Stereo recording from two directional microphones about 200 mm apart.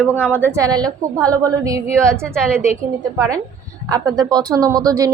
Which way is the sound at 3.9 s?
20° right (ahead or behind).